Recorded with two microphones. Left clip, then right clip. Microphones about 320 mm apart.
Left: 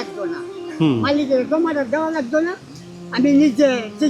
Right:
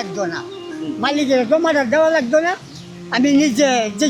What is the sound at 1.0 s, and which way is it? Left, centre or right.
A man's voice, right.